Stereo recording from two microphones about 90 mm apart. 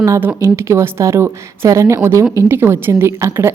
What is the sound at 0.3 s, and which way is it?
A woman's voice, 30° right (ahead or behind).